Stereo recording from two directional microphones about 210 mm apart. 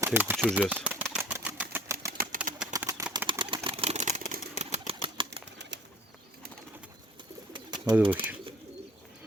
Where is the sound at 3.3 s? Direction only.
25° right (ahead or behind).